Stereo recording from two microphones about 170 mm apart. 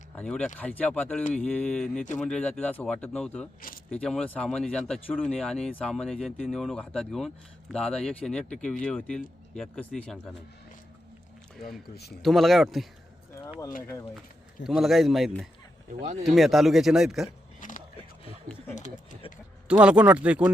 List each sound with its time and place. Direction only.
0.2 s speech: 5° left (ahead or behind)
12.2 s speech: centre (ahead or behind)
14.6 s speech: centre (ahead or behind)
17.6 s a sound: 50° left (ahead or behind)
18.7 s speech: 45° left (ahead or behind)
19.6 s speech: 5° right (ahead or behind)